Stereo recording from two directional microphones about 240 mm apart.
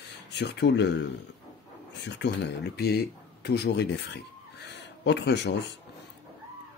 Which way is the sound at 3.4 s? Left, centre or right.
Left.